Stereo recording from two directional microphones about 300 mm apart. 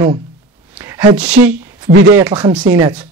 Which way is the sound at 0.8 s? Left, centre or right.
Centre.